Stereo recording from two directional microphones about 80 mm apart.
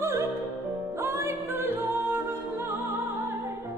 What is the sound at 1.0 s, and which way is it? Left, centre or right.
Music, right.